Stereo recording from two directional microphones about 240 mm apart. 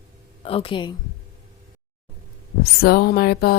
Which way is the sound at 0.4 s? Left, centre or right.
Left.